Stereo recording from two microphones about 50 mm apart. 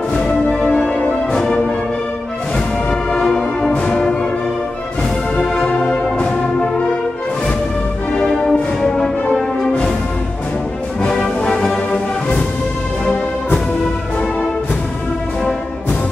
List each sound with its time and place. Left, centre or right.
0.1 s music: left
3.2 s music: centre
3.7 s music: left
5.4 s music: centre
6.1 s brass instrument: left
8.5 s music: centre
11.1 s music: centre